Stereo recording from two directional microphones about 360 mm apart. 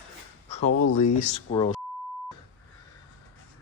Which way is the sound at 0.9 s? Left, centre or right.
Centre.